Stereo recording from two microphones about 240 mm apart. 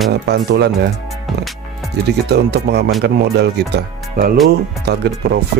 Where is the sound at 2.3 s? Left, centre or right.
Right.